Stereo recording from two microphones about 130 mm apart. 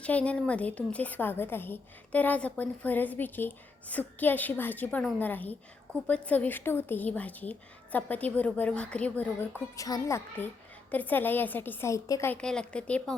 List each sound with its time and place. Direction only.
0.0 s a woman's voice: 10° left (ahead or behind)
9.7 s a woman's voice: 25° left (ahead or behind)
12.3 s a woman's voice: 5° left (ahead or behind)